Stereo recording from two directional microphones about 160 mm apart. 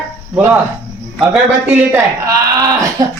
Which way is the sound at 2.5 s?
20° right (ahead or behind).